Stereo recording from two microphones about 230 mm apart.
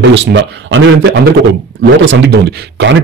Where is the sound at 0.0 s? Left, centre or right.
Right.